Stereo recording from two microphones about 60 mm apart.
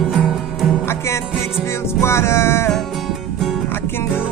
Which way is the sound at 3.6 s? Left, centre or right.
Left.